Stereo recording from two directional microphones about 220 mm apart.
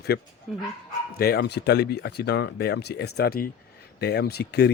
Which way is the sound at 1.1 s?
45° left (ahead or behind).